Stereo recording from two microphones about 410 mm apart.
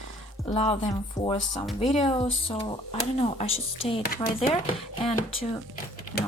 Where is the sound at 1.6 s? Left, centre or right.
Centre.